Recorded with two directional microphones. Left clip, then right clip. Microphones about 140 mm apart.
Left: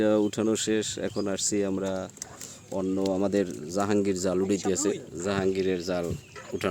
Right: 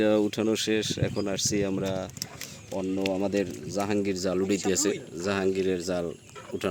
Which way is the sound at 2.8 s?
30° left (ahead or behind).